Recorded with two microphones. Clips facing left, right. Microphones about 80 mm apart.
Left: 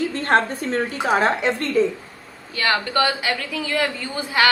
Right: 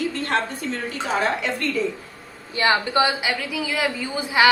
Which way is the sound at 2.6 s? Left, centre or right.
Centre.